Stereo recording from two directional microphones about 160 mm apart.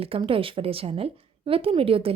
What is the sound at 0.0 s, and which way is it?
Speech, 35° right (ahead or behind).